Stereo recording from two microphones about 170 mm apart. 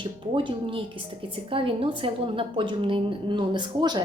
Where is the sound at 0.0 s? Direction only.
30° right (ahead or behind).